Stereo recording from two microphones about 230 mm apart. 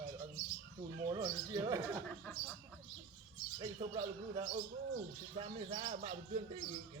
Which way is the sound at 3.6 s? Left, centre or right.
Right.